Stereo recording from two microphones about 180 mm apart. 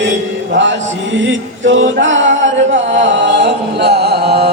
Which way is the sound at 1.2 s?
90° right.